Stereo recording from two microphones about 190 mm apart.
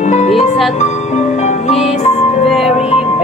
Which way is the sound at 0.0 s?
40° left (ahead or behind).